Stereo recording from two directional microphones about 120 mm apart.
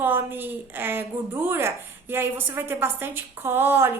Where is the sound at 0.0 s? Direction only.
15° right (ahead or behind).